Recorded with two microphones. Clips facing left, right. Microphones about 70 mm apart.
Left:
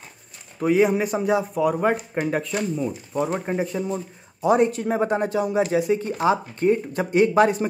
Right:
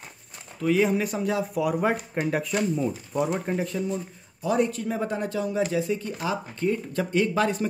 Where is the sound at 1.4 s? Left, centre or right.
Centre.